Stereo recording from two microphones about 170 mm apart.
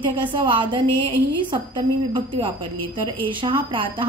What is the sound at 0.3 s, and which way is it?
A woman's voice, 30° right (ahead or behind).